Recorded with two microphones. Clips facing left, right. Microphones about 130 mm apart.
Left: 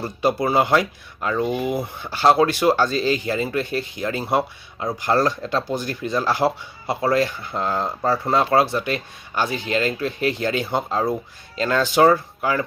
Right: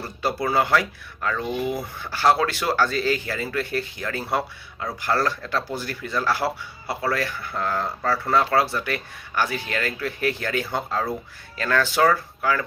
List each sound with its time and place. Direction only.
0.0 s speech: 15° left (ahead or behind)